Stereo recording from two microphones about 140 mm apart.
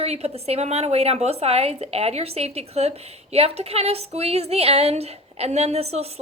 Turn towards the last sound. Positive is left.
turn(degrees=-45)  # may be behind; listen again after turning